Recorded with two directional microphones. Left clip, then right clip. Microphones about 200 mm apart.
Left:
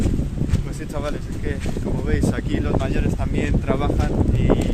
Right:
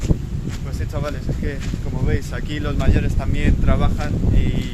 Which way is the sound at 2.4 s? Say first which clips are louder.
Left 2 dB; 5° right (ahead or behind).